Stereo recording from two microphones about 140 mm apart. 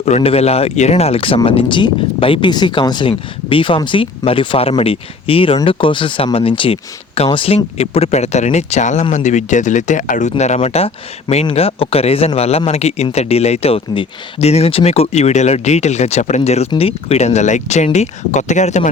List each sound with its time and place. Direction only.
0.0 s speech: 45° left (ahead or behind)